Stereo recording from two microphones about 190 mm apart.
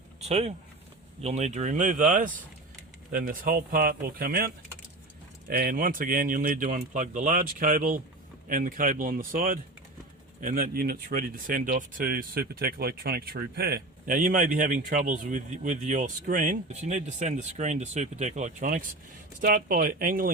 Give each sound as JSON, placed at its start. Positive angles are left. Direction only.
{"t": 0.2, "sound": "speech", "side_deg": -35}